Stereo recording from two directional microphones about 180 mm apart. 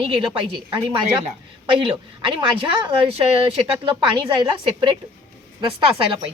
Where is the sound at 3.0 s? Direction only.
30° right (ahead or behind).